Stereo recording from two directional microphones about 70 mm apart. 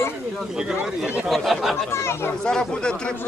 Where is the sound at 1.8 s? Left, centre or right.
Left.